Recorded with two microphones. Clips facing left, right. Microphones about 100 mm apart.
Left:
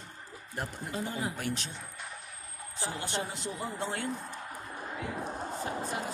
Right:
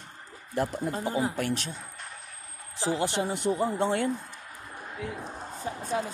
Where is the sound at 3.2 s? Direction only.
60° right (ahead or behind).